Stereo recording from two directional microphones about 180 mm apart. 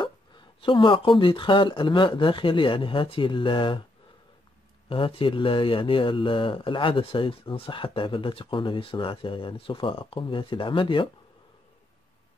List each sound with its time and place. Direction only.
0.0 s speech: 25° left (ahead or behind)
4.8 s speech: 30° left (ahead or behind)